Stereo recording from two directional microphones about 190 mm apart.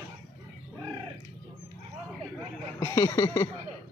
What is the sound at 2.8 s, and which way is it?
Speech, 15° left (ahead or behind).